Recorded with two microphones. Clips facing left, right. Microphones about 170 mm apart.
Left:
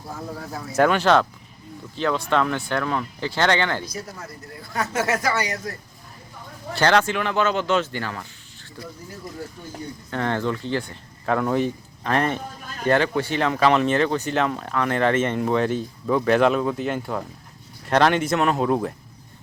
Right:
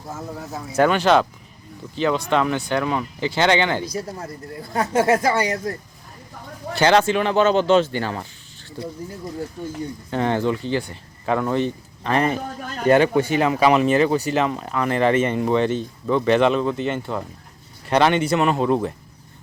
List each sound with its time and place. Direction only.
0.1 s speech: 5° right (ahead or behind)
3.9 s speech: 30° right (ahead or behind)
6.7 s speech: 15° right (ahead or behind)
7.0 s speech: 25° right (ahead or behind)
10.1 s speech: 15° right (ahead or behind)
12.9 s speech: 15° right (ahead or behind); by 18.9 s centre (ahead or behind)